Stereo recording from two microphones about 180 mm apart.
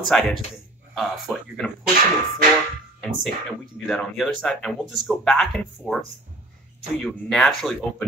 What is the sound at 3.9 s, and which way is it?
A man's voice, centre (ahead or behind).